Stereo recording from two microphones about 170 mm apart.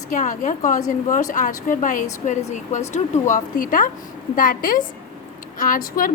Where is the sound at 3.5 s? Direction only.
55° left (ahead or behind).